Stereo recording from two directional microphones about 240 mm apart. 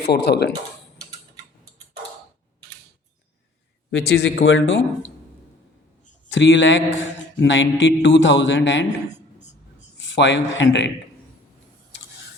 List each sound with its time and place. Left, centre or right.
0.1 s a man's voice: left
3.9 s a man's voice: left
6.2 s a man's voice: left
10.0 s speech: left